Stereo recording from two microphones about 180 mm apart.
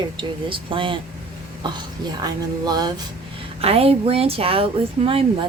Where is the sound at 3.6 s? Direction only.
35° right (ahead or behind).